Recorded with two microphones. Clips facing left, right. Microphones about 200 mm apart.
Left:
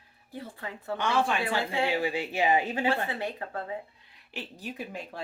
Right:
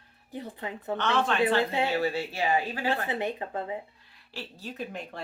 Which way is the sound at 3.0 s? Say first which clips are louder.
Right 3 dB; 20° right (ahead or behind).